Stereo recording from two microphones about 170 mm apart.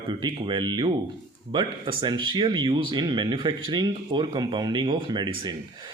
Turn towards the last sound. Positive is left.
turn(degrees=-25)  # may be behind; listen again after turning